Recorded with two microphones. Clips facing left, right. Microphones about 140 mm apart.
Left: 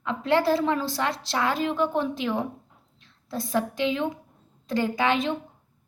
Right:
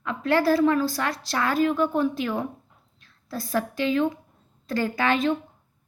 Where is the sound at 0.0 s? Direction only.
20° left (ahead or behind).